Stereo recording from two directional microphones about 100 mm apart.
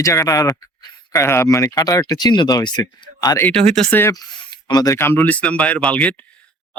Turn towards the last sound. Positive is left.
turn(degrees=15)  # may be behind; listen again after turning